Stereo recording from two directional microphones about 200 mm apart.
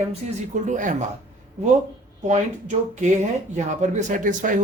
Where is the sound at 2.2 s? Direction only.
35° right (ahead or behind).